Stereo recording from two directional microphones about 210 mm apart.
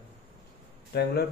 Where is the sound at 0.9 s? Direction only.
50° left (ahead or behind).